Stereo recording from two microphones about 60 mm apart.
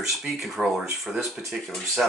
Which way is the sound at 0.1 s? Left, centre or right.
Centre.